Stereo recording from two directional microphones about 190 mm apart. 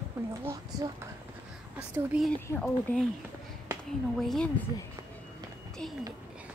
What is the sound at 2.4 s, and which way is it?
Speech, 10° left (ahead or behind).